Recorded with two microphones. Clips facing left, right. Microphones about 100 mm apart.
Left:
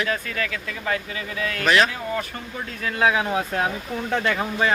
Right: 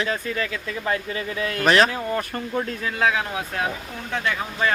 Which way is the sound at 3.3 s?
35° left (ahead or behind).